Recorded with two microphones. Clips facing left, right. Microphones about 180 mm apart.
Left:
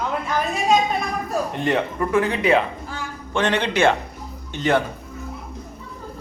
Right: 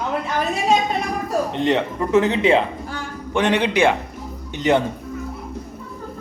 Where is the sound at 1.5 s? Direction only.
20° right (ahead or behind).